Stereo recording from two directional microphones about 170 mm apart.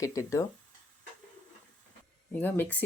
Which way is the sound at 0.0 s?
20° left (ahead or behind).